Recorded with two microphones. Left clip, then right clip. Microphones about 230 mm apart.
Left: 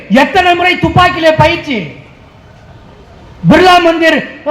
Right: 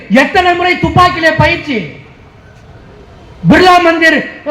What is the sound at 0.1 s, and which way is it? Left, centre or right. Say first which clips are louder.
A man's voice: left 1 dB; left.